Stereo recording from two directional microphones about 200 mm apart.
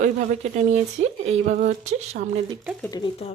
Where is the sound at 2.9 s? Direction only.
25° left (ahead or behind).